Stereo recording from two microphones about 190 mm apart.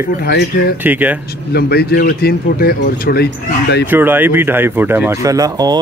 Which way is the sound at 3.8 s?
10° right (ahead or behind).